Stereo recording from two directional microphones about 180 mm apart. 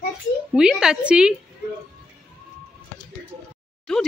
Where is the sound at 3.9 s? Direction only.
5° left (ahead or behind).